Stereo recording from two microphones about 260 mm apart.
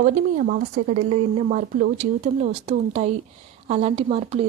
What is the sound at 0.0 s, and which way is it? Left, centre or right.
Speech, right.